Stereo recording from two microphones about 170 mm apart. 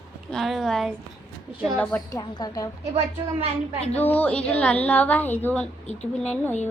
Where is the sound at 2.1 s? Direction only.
20° left (ahead or behind).